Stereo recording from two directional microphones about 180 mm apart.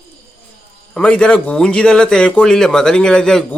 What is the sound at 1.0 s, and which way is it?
Speech, 5° left (ahead or behind).